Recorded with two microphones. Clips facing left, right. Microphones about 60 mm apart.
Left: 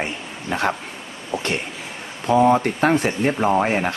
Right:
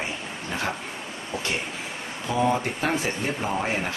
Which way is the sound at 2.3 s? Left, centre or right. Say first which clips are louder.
Left 8 dB; left.